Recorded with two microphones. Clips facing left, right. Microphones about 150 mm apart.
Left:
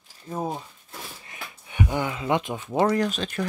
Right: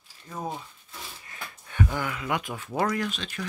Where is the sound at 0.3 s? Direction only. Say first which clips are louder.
Left 6 dB; 30° left (ahead or behind).